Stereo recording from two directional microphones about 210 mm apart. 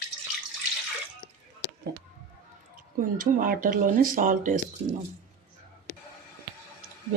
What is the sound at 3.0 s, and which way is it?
Speech, 40° right (ahead or behind).